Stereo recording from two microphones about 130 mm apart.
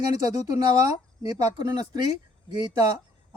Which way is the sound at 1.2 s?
30° right (ahead or behind).